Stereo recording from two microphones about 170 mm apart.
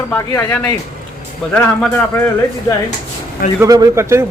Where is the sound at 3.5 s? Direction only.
20° right (ahead or behind).